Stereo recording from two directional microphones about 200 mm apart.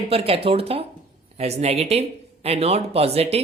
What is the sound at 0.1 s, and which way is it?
Speech, 30° right (ahead or behind).